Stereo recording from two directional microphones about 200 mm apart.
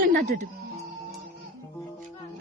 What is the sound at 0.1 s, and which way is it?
Music, 45° right (ahead or behind).